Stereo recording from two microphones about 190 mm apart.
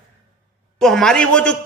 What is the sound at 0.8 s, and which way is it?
Speech, centre (ahead or behind).